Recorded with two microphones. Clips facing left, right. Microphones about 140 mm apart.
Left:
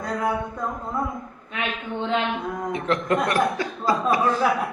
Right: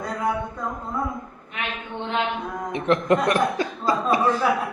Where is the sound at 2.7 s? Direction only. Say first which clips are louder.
Right 4 dB; 20° right (ahead or behind).